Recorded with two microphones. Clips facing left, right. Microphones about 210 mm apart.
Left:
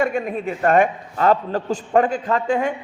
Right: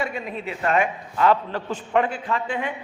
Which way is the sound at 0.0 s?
50° left (ahead or behind).